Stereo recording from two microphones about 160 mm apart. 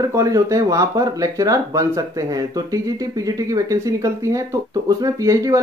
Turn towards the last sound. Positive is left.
turn(degrees=-20)  # may be behind; listen again after turning